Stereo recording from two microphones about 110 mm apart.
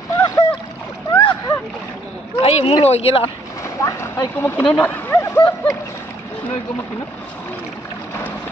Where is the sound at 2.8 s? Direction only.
65° left (ahead or behind).